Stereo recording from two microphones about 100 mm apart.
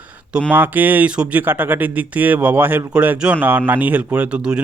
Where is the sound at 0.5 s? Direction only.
20° right (ahead or behind).